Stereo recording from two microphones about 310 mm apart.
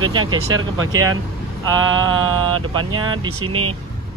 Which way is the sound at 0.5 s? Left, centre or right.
Right.